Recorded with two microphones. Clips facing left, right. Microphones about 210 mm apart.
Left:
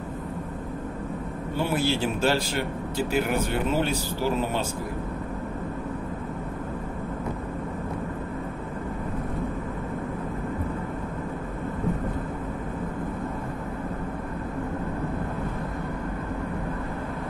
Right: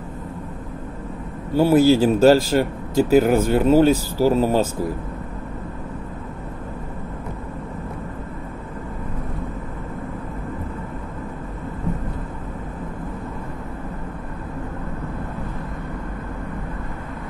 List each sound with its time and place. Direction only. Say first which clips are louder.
1.5 s speech: right 12 dB; 40° right (ahead or behind)